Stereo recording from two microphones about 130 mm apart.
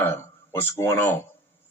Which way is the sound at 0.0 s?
15° left (ahead or behind).